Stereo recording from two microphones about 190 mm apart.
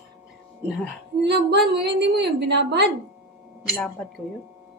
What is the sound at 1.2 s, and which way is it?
A woman's voice, 60° right (ahead or behind).